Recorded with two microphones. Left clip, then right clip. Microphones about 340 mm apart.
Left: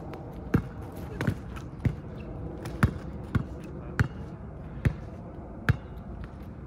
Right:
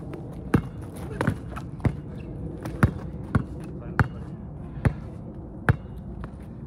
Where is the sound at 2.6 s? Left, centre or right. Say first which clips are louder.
Right 4 dB; centre.